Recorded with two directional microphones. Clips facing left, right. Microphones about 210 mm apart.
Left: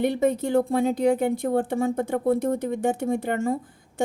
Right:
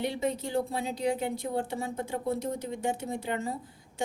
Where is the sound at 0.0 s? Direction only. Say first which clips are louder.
Left 8 dB; 55° left (ahead or behind).